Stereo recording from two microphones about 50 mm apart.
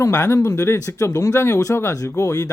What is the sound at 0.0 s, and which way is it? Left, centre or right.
Speech, left.